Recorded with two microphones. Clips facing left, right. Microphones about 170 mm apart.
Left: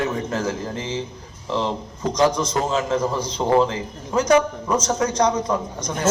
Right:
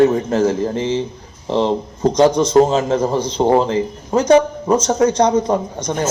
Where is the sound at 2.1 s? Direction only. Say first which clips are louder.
Right 8 dB; 25° right (ahead or behind).